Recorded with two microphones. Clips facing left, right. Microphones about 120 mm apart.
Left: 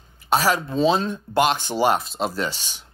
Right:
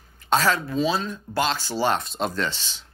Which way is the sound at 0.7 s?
30° left (ahead or behind).